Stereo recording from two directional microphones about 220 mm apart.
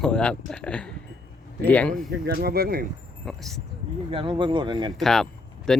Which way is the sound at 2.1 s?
45° right (ahead or behind).